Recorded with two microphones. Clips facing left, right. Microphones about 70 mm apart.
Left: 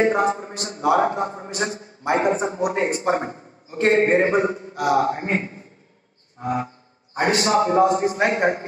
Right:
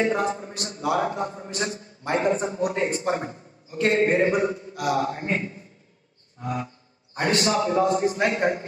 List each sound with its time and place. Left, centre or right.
0.0 s a man's voice: left